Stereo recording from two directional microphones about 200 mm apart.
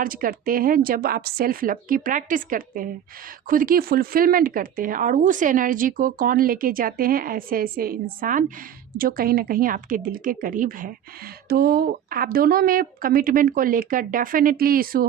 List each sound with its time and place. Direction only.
0.0 s speech: 45° right (ahead or behind)